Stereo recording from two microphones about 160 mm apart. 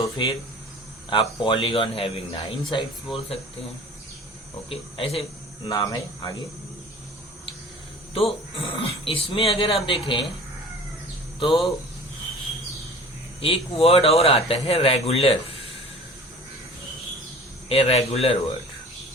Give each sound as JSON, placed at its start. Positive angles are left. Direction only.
{"t": 0.2, "sound": "a man's voice", "side_deg": 30}
{"t": 4.7, "sound": "a man's voice", "side_deg": 35}
{"t": 5.6, "sound": "speech", "side_deg": 20}
{"t": 8.1, "sound": "a man's voice", "side_deg": 35}
{"t": 11.3, "sound": "speech", "side_deg": 35}
{"t": 13.4, "sound": "a man's voice", "side_deg": 35}
{"t": 17.7, "sound": "a man's voice", "side_deg": 35}